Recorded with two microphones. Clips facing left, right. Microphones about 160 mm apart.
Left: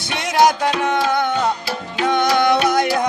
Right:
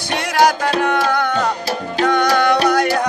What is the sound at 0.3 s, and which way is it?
Music, 20° left (ahead or behind).